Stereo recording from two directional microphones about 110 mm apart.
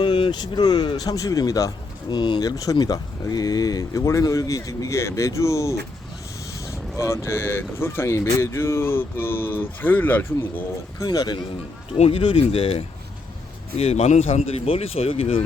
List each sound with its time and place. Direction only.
0.0 s speech: 45° left (ahead or behind)
2.1 s speech: 45° left (ahead or behind); by 10.2 s 15° left (ahead or behind)
11.0 s speech: 40° left (ahead or behind)
11.9 s speech: 65° left (ahead or behind)
13.7 s speech: 70° left (ahead or behind)